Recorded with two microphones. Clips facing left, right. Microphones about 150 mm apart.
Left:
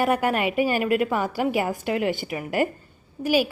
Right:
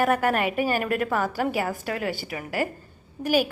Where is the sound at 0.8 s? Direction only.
10° left (ahead or behind).